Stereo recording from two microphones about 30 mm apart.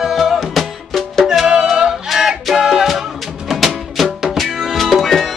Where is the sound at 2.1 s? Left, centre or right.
Centre.